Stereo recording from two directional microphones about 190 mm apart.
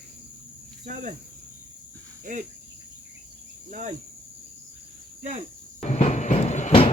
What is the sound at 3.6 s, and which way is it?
Cricket, 40° right (ahead or behind).